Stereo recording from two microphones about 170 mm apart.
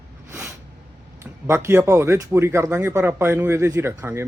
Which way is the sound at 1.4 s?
15° right (ahead or behind).